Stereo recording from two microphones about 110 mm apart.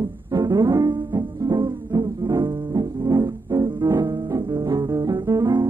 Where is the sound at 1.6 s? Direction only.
35° right (ahead or behind); by 4.2 s 20° right (ahead or behind).